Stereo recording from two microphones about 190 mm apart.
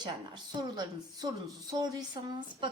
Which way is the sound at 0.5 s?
20° right (ahead or behind).